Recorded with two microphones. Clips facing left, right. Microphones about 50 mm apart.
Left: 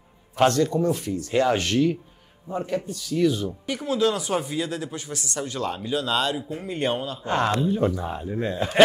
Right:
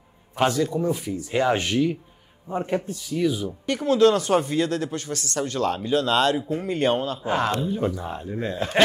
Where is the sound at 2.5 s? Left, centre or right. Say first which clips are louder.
Right 2 dB; right.